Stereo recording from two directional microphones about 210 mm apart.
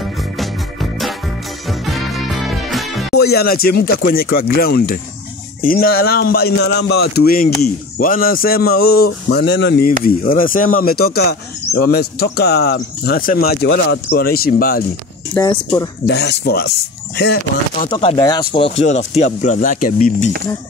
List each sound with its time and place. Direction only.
0.4 s music: centre (ahead or behind)
2.5 s music: centre (ahead or behind)
3.1 s speech: 50° left (ahead or behind)
15.3 s speech: 15° left (ahead or behind)
16.1 s speech: 50° left (ahead or behind)
17.8 s speech: 20° left (ahead or behind)
19.1 s speech: 35° left (ahead or behind)